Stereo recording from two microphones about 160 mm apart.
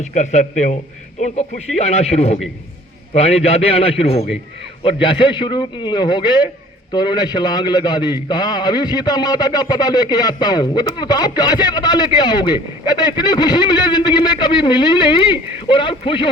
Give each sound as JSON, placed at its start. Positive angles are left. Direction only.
{"t": 0.0, "sound": "a man's voice", "side_deg": 50}